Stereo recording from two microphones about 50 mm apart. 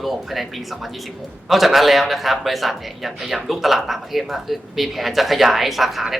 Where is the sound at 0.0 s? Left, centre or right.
Centre.